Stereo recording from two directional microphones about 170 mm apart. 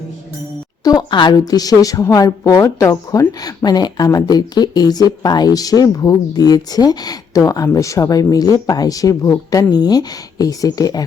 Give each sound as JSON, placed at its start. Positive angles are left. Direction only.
{"t": 0.9, "sound": "a woman's voice", "side_deg": 25}